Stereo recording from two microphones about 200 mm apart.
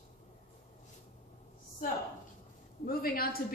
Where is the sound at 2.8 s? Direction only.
50° left (ahead or behind).